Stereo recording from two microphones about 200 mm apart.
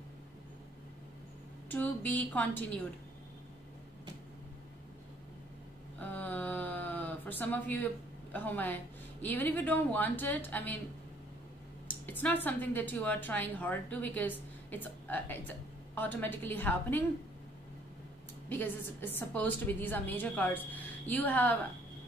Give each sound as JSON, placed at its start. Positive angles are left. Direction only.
{"t": 1.7, "sound": "a woman's voice", "side_deg": 10}
{"t": 5.9, "sound": "a sound", "side_deg": 10}
{"t": 12.1, "sound": "a woman's voice", "side_deg": 10}
{"t": 18.5, "sound": "a woman's voice", "side_deg": 10}